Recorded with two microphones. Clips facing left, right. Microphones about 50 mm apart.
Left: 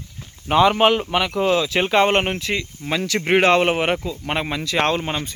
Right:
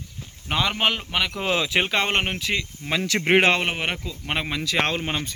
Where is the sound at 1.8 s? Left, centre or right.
Centre.